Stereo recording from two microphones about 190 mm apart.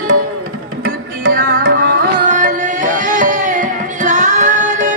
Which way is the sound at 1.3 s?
45° right (ahead or behind).